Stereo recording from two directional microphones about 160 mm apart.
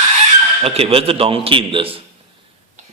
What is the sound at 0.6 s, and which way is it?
A man's voice, 35° right (ahead or behind).